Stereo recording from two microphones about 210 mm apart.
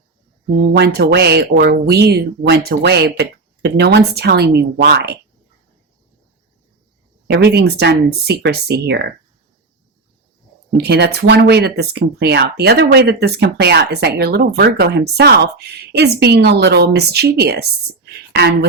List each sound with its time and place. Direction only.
0.8 s speech: 50° right (ahead or behind)
7.3 s speech: 50° right (ahead or behind)
10.8 s speech: 50° right (ahead or behind)